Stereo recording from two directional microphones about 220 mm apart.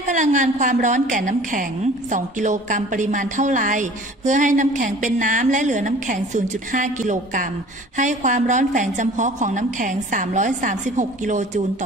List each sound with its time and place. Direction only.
0.0 s a woman's voice: 35° right (ahead or behind)